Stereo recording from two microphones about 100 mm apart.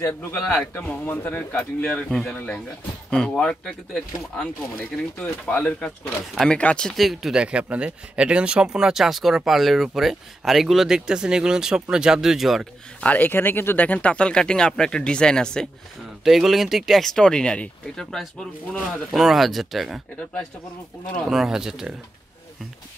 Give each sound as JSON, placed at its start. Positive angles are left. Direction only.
{"t": 0.4, "sound": "speech", "side_deg": 10}
{"t": 0.7, "sound": "speech", "side_deg": 20}
{"t": 1.9, "sound": "speech", "side_deg": 5}
{"t": 7.0, "sound": "speech", "side_deg": 0}
{"t": 13.0, "sound": "speech", "side_deg": 15}
{"t": 21.3, "sound": "speech", "side_deg": -5}